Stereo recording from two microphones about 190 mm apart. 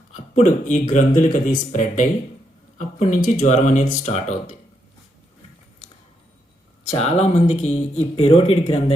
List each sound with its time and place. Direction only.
0.1 s speech: 40° left (ahead or behind)
6.8 s speech: 35° left (ahead or behind)